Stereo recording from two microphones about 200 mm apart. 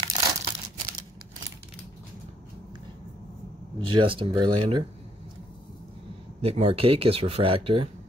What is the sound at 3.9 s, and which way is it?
Speech, 25° right (ahead or behind).